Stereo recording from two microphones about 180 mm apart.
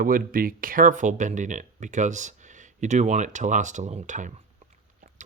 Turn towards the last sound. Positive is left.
turn(degrees=-45)  # may be behind; listen again after turning